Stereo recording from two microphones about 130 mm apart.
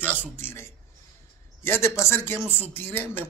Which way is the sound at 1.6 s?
20° left (ahead or behind).